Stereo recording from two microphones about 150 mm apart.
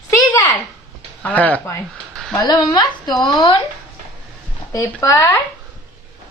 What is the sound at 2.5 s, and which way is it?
Speech, 25° left (ahead or behind).